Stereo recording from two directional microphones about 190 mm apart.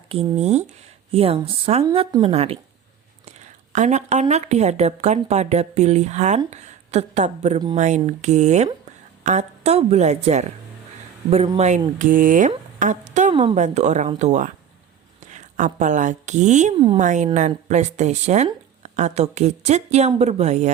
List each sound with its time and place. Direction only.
0.1 s speech: 30° right (ahead or behind)
11.5 s speech: 35° right (ahead or behind)